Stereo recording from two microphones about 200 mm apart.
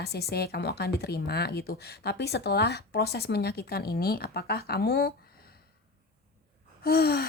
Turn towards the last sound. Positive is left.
turn(degrees=50)  # may be behind; listen again after turning